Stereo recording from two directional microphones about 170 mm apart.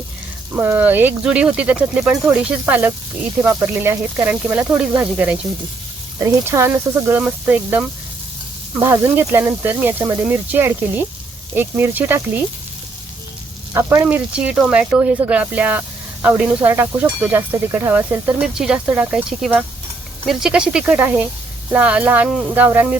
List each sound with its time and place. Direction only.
0.5 s speech: 10° right (ahead or behind)
13.7 s speech: 10° right (ahead or behind)